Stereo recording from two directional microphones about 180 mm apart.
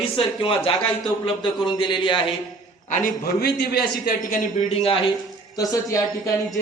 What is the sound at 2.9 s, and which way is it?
Speech, 50° left (ahead or behind).